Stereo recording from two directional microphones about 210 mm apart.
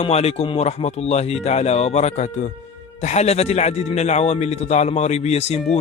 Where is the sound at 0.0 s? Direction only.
30° left (ahead or behind).